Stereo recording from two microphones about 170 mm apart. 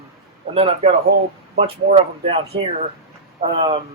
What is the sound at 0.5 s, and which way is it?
Speech, 35° right (ahead or behind).